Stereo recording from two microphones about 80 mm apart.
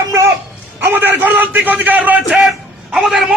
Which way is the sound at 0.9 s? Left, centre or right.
Right.